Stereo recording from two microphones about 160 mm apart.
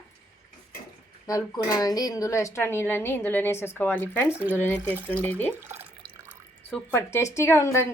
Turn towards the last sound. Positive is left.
turn(degrees=15)  # may be behind; listen again after turning